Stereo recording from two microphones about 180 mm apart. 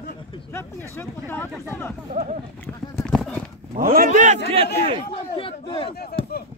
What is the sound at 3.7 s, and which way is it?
Speech, 55° right (ahead or behind).